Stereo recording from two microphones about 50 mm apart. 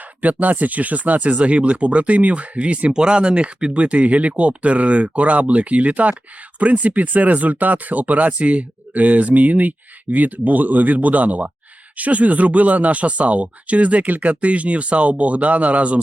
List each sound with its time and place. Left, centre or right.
0.0 s speech: right